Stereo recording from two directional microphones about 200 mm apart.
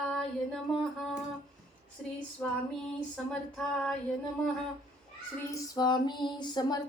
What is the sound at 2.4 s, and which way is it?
Female singing, 10° left (ahead or behind).